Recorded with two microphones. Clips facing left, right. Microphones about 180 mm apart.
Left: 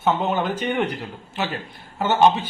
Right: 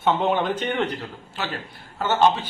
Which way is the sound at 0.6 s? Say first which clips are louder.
Left 1 dB; 15° left (ahead or behind).